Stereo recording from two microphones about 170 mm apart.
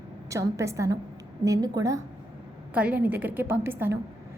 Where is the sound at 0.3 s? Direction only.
20° right (ahead or behind).